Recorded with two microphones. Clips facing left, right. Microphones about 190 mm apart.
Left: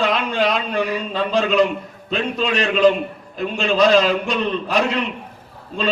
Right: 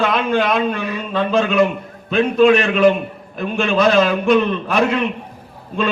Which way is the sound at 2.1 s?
55° right (ahead or behind).